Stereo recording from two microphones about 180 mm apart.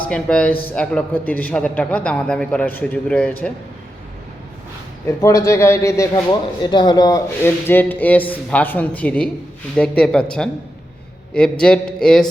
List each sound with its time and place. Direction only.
0.0 s a man's voice: 5° left (ahead or behind)
5.0 s a man's voice: 20° left (ahead or behind); by 12.2 s 5° left (ahead or behind)